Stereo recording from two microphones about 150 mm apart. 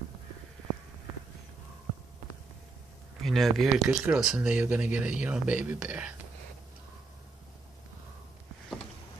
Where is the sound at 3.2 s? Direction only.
Centre (ahead or behind).